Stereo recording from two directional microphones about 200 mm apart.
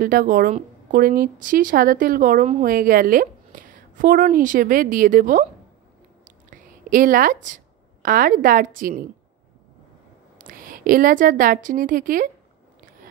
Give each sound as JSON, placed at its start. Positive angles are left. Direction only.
{"t": 0.0, "sound": "a woman's voice", "side_deg": -45}
{"t": 6.2, "sound": "a sound", "side_deg": -40}
{"t": 10.4, "sound": "a woman's voice", "side_deg": -45}